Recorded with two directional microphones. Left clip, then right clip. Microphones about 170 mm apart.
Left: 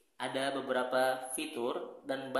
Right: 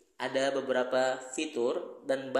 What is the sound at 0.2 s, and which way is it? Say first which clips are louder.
A man's voice: right 5 dB; 10° right (ahead or behind).